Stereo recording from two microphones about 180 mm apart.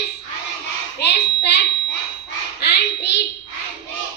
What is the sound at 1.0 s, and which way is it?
Child singing, 70° left (ahead or behind).